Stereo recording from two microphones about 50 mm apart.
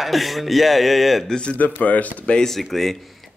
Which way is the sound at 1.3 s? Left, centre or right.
Centre.